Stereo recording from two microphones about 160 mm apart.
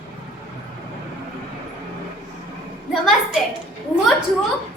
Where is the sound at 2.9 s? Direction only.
Centre (ahead or behind).